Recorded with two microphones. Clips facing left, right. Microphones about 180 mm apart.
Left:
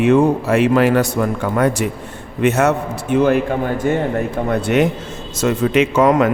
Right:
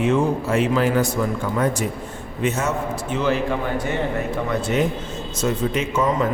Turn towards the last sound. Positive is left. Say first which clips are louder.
# left 8 dB
turn(degrees=75)  # may be behind; listen again after turning